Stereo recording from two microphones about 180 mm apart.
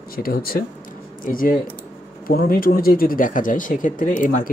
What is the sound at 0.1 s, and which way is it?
Speech, 55° left (ahead or behind).